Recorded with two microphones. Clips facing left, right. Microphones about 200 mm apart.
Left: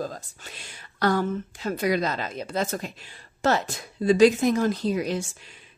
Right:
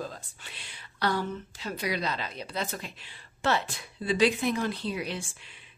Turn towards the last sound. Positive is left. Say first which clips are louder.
# left 7 dB
turn(degrees=40)  # may be behind; listen again after turning